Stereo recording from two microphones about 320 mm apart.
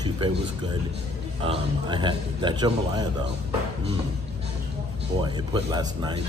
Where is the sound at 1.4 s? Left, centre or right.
Centre.